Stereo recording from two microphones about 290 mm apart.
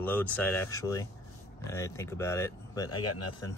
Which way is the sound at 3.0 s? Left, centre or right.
Left.